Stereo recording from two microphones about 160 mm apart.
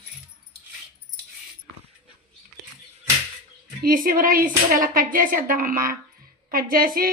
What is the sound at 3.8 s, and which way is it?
Speech, 60° right (ahead or behind).